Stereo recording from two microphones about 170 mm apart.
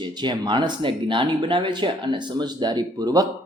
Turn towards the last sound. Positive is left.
turn(degrees=-20)  # may be behind; listen again after turning